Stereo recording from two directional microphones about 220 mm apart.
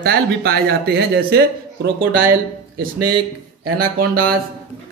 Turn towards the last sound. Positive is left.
turn(degrees=-40)  # may be behind; listen again after turning